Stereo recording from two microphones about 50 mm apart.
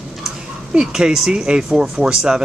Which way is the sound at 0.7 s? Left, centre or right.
Centre.